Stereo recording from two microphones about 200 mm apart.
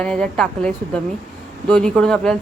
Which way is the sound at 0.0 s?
5° left (ahead or behind).